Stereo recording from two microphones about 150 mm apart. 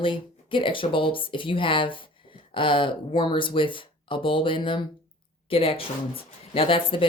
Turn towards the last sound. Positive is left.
turn(degrees=35)  # may be behind; listen again after turning